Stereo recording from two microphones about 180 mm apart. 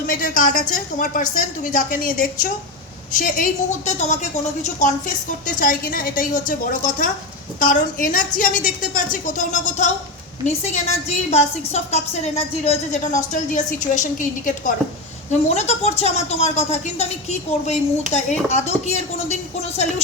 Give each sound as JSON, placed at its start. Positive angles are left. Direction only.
{"t": 0.1, "sound": "a woman's voice", "side_deg": 50}
{"t": 11.3, "sound": "a woman's voice", "side_deg": 40}